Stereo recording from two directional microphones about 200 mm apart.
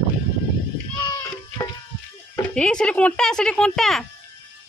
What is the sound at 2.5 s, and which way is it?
Speech, 5° left (ahead or behind).